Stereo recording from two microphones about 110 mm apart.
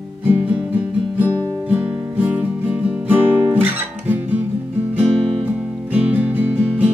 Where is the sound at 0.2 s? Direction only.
15° right (ahead or behind).